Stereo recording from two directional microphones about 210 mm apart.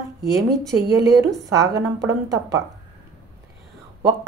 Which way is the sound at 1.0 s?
15° right (ahead or behind).